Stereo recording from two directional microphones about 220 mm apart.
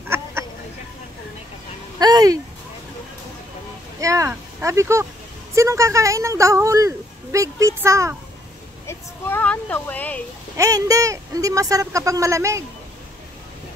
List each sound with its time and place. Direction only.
0.1 s duck: 10° right (ahead or behind)
2.0 s a sound: 15° right (ahead or behind)
4.0 s vehicle: 15° right (ahead or behind)
5.5 s a woman's voice: 15° right (ahead or behind)
8.8 s a sound: 10° left (ahead or behind)
10.6 s speech: 15° right (ahead or behind)